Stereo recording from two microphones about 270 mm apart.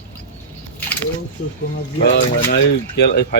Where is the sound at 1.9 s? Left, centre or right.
Left.